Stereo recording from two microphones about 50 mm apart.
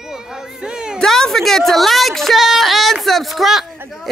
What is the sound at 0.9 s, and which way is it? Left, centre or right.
A woman's voice, centre.